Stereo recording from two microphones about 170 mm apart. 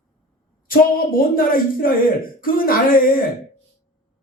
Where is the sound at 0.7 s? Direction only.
55° left (ahead or behind).